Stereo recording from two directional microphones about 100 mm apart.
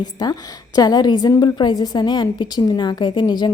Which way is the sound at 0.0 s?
40° left (ahead or behind).